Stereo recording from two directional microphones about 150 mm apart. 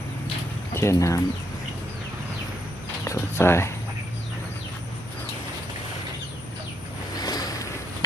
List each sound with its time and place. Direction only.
0.7 s speech: 15° left (ahead or behind)
3.0 s speech: 15° left (ahead or behind)
7.2 s a sound: 25° left (ahead or behind)